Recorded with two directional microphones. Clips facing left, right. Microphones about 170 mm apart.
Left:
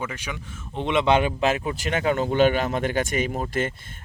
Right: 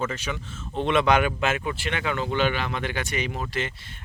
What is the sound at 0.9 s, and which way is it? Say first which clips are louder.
Speech: left 1 dB; 25° left (ahead or behind).